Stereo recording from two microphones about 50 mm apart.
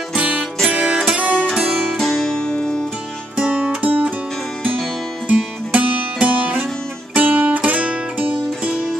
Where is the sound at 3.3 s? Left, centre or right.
Right.